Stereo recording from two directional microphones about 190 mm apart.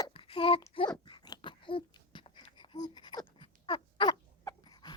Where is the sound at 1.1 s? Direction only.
20° left (ahead or behind).